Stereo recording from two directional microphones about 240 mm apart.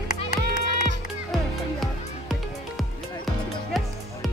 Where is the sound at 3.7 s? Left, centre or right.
Centre.